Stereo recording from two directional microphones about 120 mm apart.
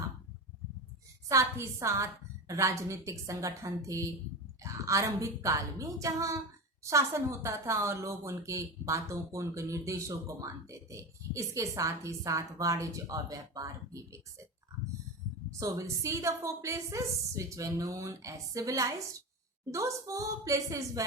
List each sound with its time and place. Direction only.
1.3 s speech: 25° right (ahead or behind)
15.5 s speech: 25° right (ahead or behind)